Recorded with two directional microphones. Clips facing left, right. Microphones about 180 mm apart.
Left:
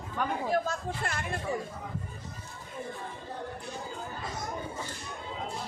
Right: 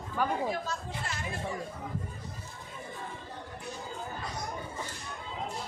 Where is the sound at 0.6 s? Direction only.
55° left (ahead or behind).